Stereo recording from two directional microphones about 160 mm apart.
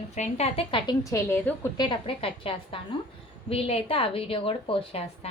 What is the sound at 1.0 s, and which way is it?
Speech, 20° left (ahead or behind).